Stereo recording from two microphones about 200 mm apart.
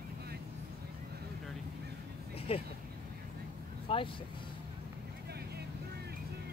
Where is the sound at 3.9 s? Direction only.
25° left (ahead or behind).